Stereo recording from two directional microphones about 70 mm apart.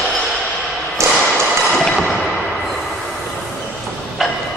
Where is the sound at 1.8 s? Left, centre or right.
Centre.